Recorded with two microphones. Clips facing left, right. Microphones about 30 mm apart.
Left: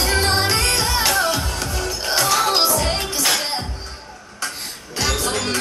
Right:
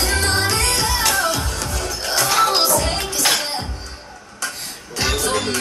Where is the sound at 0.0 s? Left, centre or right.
Centre.